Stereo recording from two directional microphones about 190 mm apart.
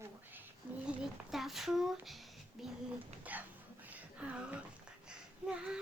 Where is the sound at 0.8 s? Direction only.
Centre (ahead or behind).